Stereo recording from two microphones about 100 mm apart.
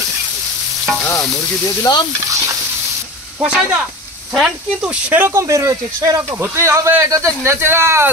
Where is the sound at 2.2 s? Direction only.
30° right (ahead or behind).